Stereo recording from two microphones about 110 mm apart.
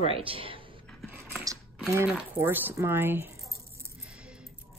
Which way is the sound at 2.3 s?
20° right (ahead or behind).